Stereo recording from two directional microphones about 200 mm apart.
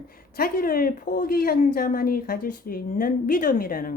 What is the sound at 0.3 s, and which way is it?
A woman's voice, 45° left (ahead or behind).